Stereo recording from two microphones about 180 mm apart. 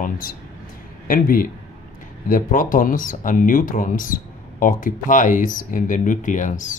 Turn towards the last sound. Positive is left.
turn(degrees=45)  # may be behind; listen again after turning